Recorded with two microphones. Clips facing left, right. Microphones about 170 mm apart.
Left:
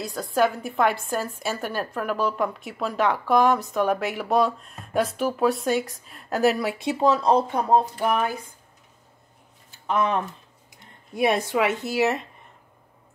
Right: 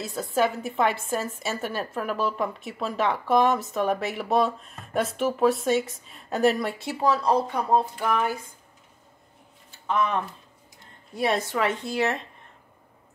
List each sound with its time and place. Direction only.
0.0 s a woman's voice: centre (ahead or behind)
6.8 s speech: 20° left (ahead or behind)
11.1 s speech: 15° left (ahead or behind)